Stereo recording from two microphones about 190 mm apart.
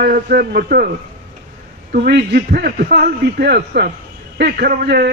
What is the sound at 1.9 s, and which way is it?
A man's voice, 60° right (ahead or behind).